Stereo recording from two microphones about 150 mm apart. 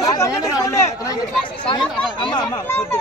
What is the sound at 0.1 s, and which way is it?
Chatter, 20° left (ahead or behind).